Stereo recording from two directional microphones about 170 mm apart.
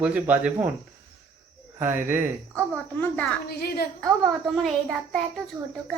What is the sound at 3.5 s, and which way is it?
Speech, 65° left (ahead or behind).